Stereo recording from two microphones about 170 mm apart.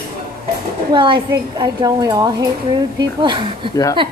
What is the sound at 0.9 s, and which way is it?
A woman's voice, 30° right (ahead or behind).